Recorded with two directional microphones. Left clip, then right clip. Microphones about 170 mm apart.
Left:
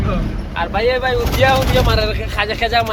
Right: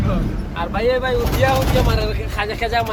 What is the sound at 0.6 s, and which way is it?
Speech, 5° right (ahead or behind).